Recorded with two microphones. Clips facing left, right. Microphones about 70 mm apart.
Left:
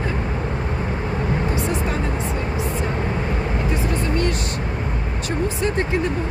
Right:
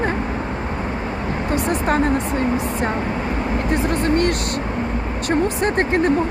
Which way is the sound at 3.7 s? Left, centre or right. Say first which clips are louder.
Right 7 dB; right.